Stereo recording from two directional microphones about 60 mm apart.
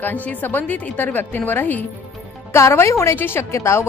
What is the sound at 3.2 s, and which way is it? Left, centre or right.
Speech, left.